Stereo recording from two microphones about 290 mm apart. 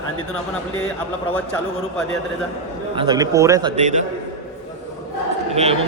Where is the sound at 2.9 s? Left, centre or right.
Centre.